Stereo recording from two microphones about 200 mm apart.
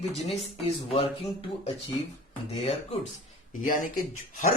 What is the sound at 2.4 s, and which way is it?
Speech, 30° left (ahead or behind).